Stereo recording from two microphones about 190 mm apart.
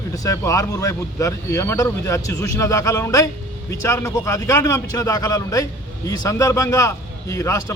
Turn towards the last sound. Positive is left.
turn(degrees=15)  # may be behind; listen again after turning